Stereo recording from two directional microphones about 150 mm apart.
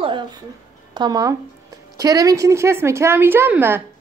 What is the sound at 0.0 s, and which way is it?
Speech, 30° right (ahead or behind).